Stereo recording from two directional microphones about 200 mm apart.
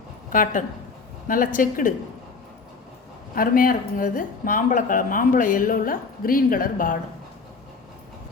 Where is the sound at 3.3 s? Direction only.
45° left (ahead or behind).